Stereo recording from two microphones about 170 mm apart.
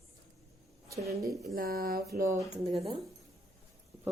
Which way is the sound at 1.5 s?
60° right (ahead or behind).